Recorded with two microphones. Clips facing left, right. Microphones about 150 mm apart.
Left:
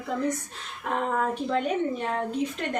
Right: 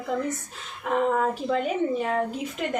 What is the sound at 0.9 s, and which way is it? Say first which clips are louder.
A woman's voice: right 3 dB; centre (ahead or behind).